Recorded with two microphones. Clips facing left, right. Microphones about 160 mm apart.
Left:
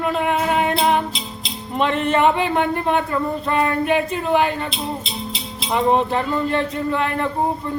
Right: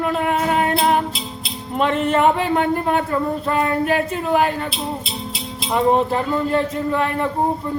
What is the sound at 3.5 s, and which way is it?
Speech, centre (ahead or behind).